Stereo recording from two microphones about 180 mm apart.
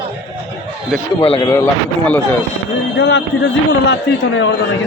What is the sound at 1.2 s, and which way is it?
Speech, 30° left (ahead or behind).